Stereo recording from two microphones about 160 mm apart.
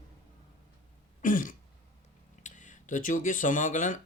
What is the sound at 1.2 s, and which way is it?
Throat clearing, 55° left (ahead or behind).